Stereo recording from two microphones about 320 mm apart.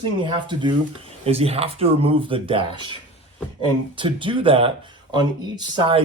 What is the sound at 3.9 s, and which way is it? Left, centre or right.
Speech, centre.